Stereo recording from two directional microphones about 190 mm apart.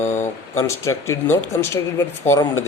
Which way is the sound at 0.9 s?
15° left (ahead or behind).